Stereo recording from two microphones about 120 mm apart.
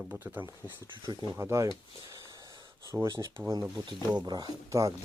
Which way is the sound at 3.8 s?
40° right (ahead or behind).